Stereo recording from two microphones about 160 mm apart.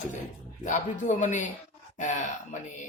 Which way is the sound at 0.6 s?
50° left (ahead or behind).